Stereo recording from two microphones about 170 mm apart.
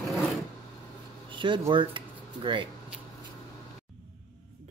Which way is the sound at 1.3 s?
30° right (ahead or behind).